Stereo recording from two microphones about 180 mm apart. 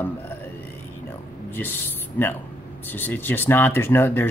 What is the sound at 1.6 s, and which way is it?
Speech, 10° left (ahead or behind).